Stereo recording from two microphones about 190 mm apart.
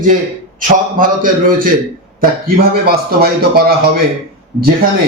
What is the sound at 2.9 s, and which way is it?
Speech, 55° right (ahead or behind).